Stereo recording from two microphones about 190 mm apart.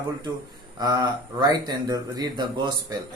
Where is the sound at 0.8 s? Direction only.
20° right (ahead or behind).